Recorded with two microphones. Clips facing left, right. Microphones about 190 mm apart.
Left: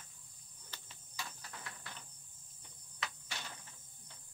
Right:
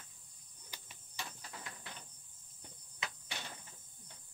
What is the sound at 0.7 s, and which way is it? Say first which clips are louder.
Cricket: even; 15° right (ahead or behind).